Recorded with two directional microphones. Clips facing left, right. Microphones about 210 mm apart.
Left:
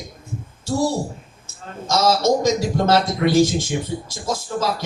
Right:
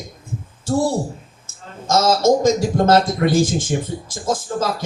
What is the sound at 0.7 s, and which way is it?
Speech, 50° right (ahead or behind).